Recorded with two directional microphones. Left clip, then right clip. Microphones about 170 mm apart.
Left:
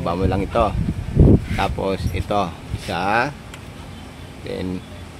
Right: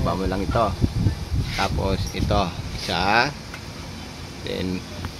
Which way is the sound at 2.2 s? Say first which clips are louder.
Left 2 dB; 20° left (ahead or behind).